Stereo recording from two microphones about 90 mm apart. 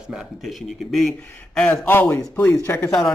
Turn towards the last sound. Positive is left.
turn(degrees=40)  # may be behind; listen again after turning